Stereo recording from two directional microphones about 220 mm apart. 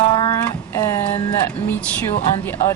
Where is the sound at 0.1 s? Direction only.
20° left (ahead or behind).